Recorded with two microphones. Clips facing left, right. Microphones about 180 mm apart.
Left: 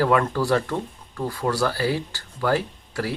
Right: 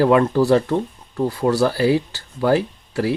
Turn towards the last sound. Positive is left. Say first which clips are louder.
# right 6 dB
turn(degrees=-20)  # may be behind; listen again after turning